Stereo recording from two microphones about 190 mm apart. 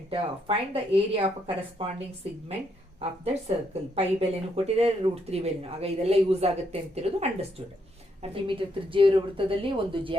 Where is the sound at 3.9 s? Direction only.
30° right (ahead or behind).